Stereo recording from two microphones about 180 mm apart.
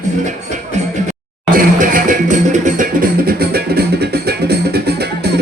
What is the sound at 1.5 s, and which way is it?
Music, 50° right (ahead or behind).